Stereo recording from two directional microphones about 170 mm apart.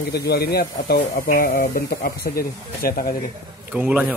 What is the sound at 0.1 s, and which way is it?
Speech, 70° left (ahead or behind).